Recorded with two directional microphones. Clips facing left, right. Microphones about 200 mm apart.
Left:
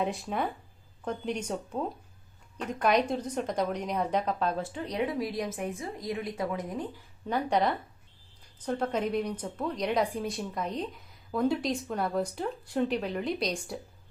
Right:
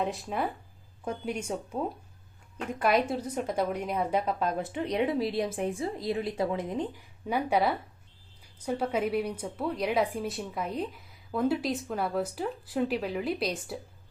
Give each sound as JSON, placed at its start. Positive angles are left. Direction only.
{"t": 0.0, "sound": "a woman's voice", "side_deg": 0}
{"t": 7.3, "sound": "a woman's voice", "side_deg": -10}